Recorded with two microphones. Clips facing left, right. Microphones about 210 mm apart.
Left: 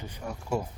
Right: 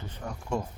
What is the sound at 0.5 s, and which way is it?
Speech, 10° left (ahead or behind).